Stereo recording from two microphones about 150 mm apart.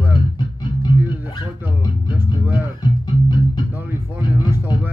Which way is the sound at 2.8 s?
30° left (ahead or behind).